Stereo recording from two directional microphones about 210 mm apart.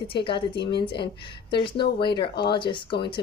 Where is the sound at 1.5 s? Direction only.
20° left (ahead or behind).